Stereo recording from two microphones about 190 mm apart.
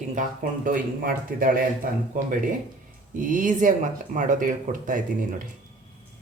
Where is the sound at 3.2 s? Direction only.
45° right (ahead or behind).